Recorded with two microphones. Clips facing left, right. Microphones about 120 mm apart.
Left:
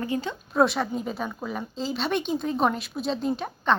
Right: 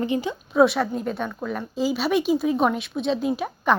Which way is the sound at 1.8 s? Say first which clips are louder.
Right 6 dB; 5° right (ahead or behind).